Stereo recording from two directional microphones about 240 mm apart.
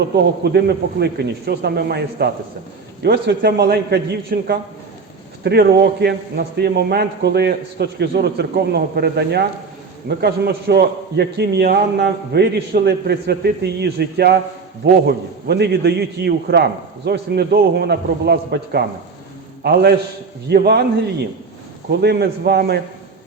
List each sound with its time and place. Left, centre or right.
0.4 s a man's voice: right
22.0 s a man's voice: right